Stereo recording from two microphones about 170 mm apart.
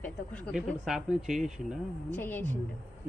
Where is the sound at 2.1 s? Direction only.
10° left (ahead or behind).